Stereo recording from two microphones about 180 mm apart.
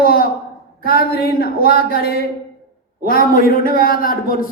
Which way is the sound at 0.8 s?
55° left (ahead or behind).